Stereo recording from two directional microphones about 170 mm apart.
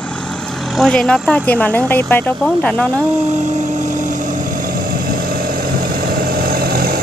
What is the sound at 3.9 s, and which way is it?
Vehicle, 50° right (ahead or behind).